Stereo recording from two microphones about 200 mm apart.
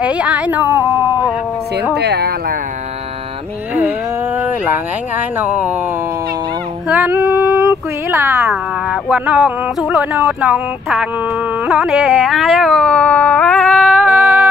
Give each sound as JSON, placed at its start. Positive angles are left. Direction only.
{"t": 0.0, "sound": "speech", "side_deg": -5}
{"t": 2.0, "sound": "speech", "side_deg": -55}
{"t": 4.4, "sound": "speech", "side_deg": -10}
{"t": 6.9, "sound": "a sound", "side_deg": -10}
{"t": 11.6, "sound": "carnatic music", "side_deg": -5}